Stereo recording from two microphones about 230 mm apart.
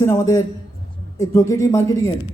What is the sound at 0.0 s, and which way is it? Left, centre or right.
A man's voice, centre.